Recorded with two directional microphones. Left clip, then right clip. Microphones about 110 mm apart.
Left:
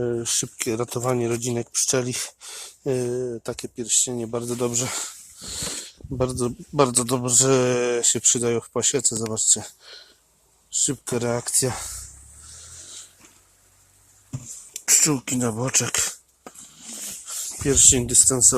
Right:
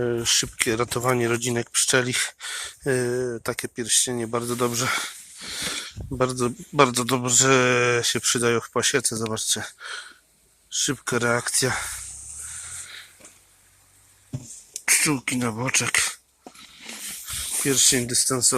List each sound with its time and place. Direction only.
0.2 s speech: 10° left (ahead or behind)
3.4 s speech: 5° right (ahead or behind)
4.7 s speech: 30° left (ahead or behind)
8.4 s speech: 20° left (ahead or behind)
14.8 s a sound: 20° left (ahead or behind)
15.1 s speech: 55° left (ahead or behind)
17.6 s speech: 60° left (ahead or behind)